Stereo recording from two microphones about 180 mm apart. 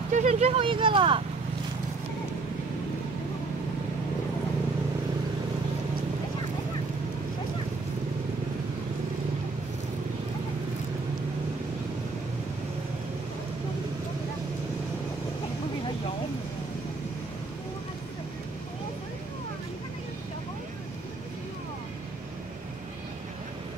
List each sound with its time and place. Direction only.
0.1 s speech: 40° right (ahead or behind)